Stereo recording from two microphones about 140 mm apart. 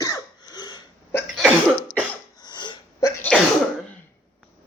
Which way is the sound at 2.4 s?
35° left (ahead or behind).